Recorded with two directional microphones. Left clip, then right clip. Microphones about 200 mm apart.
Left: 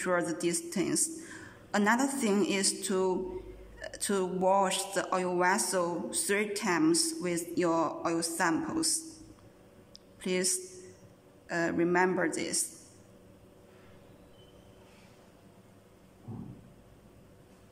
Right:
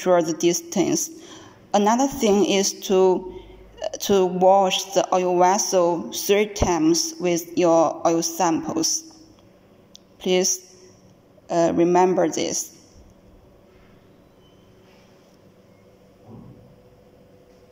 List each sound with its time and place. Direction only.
0.0 s a man's voice: 15° right (ahead or behind)
1.2 s a sound: 15° right (ahead or behind)
2.2 s a man's voice: 15° right (ahead or behind)
10.2 s a man's voice: 15° right (ahead or behind)